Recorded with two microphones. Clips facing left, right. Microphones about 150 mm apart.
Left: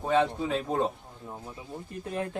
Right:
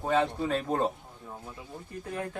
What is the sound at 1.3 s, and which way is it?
Speech, 10° left (ahead or behind).